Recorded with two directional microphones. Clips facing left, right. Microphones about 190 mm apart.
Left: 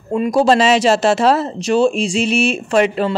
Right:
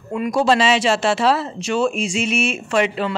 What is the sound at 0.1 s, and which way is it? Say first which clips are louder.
Speech: left 4 dB; 35° left (ahead or behind).